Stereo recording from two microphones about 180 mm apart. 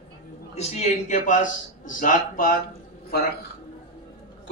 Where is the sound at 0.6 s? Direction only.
35° left (ahead or behind).